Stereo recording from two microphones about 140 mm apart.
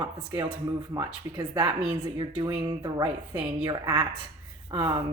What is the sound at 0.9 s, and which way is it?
A woman's voice, 30° right (ahead or behind).